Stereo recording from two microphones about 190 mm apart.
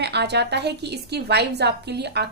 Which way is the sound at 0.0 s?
60° right (ahead or behind).